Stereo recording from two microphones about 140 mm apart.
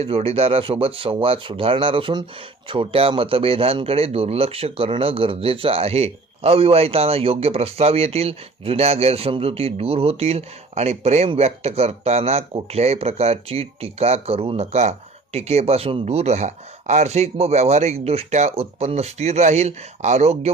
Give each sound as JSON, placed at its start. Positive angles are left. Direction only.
{"t": 0.0, "sound": "speech", "side_deg": -45}